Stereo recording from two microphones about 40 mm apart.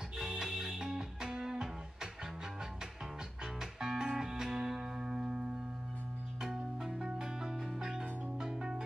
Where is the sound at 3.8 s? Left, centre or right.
Centre.